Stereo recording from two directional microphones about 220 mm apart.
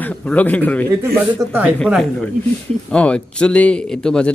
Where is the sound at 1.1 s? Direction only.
10° right (ahead or behind).